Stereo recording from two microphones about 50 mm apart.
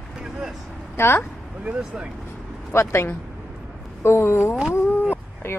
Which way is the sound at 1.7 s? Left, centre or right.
Right.